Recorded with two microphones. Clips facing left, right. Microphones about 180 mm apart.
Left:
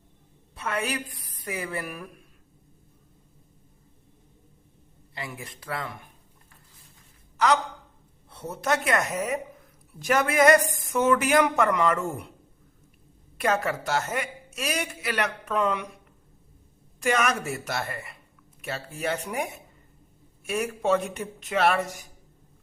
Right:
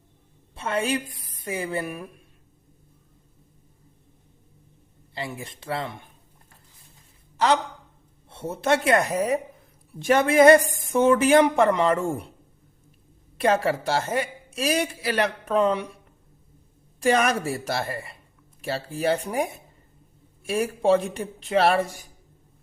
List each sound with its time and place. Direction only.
0.5 s a woman's voice: 30° right (ahead or behind)
5.1 s speech: 30° right (ahead or behind)
7.3 s a man's voice: 30° right (ahead or behind)
13.4 s a woman's voice: 30° right (ahead or behind)
17.0 s a woman's voice: 35° right (ahead or behind)